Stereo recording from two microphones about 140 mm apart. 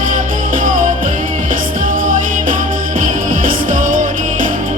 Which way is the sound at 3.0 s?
75° right (ahead or behind).